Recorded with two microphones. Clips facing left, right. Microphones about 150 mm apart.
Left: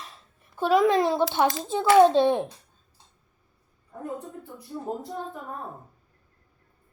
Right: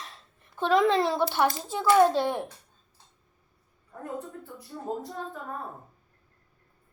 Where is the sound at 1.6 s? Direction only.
20° left (ahead or behind).